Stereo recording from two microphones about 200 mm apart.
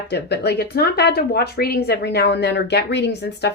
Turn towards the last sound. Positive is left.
turn(degrees=55)  # may be behind; listen again after turning